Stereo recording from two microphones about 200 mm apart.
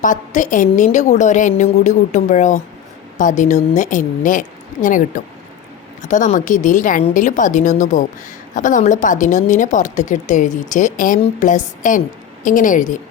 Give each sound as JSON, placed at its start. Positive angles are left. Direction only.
{"t": 0.0, "sound": "speech", "side_deg": 40}